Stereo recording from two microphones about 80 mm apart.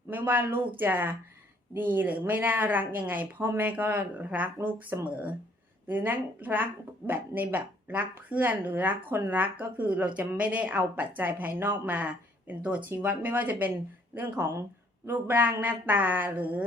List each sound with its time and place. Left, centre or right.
0.1 s speech: right
15.0 s speech: right